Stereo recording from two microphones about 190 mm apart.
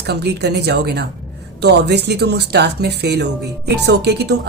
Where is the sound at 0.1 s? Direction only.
60° right (ahead or behind).